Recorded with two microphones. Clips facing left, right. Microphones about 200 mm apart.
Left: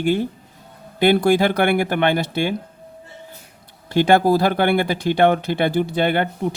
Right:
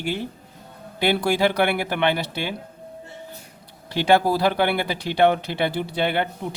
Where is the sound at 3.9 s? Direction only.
50° left (ahead or behind).